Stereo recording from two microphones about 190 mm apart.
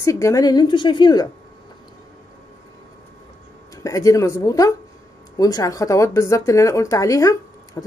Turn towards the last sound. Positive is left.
turn(degrees=15)  # may be behind; listen again after turning